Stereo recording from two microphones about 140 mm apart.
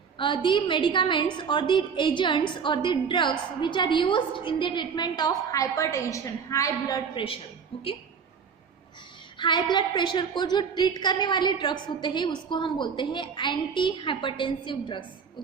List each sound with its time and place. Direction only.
0.2 s a woman's voice: 35° left (ahead or behind)
9.4 s a woman's voice: 30° left (ahead or behind)